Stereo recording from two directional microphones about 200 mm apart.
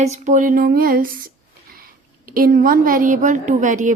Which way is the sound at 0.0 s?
40° right (ahead or behind).